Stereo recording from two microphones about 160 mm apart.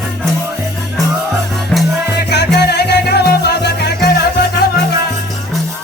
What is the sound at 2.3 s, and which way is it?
Salsa music, 90° left.